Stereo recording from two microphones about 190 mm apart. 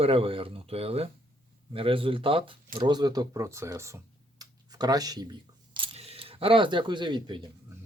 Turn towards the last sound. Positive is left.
turn(degrees=-25)  # may be behind; listen again after turning